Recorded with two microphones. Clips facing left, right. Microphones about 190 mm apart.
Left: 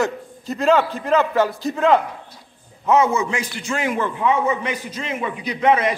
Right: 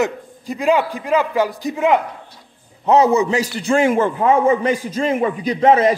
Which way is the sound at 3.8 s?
45° right (ahead or behind).